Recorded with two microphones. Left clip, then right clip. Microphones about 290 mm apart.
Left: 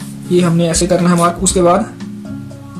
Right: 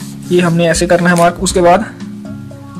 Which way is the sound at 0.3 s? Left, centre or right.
Right.